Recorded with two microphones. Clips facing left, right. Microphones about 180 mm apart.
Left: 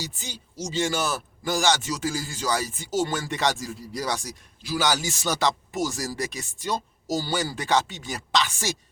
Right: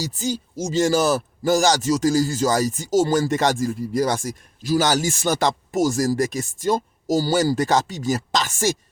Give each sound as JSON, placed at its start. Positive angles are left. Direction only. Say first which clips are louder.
{"t": 0.0, "sound": "speech", "louder": "right 12 dB", "side_deg": -40}